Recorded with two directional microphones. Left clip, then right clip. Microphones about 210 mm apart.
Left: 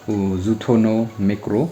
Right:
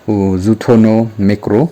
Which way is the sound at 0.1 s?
40° right (ahead or behind).